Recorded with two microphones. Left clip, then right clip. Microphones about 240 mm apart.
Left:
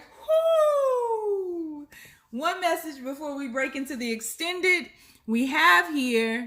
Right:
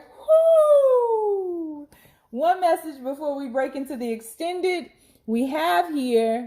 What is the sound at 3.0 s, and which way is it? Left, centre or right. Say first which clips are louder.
Speech: right 6 dB; left.